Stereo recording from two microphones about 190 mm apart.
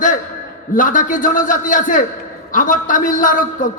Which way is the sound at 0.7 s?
45° left (ahead or behind).